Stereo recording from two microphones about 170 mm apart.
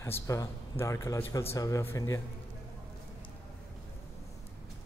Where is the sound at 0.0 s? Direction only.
15° left (ahead or behind).